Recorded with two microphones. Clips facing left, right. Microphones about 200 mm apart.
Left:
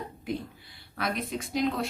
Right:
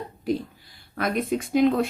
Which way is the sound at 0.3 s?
45° right (ahead or behind).